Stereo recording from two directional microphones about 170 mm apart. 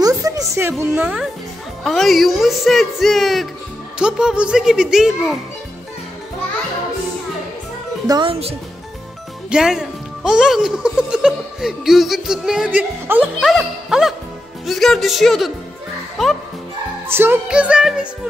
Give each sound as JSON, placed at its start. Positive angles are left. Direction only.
{"t": 0.0, "sound": "a sound", "side_deg": -20}
{"t": 1.9, "sound": "speech", "side_deg": 0}
{"t": 8.1, "sound": "speech", "side_deg": -30}
{"t": 9.5, "sound": "speech", "side_deg": -5}
{"t": 17.1, "sound": "speech", "side_deg": -10}